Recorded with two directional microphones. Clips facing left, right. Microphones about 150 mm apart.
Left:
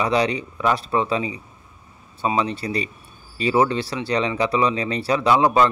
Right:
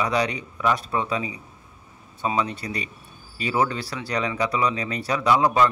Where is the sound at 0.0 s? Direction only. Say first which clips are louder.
Left 3 dB; 30° left (ahead or behind).